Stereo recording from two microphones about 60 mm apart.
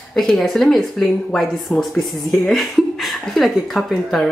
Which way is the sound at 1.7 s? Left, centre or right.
Left.